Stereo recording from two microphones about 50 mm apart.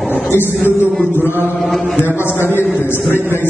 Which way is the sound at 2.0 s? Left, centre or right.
Left.